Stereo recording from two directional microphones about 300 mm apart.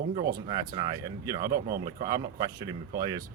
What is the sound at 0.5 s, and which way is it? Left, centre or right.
Speech, centre.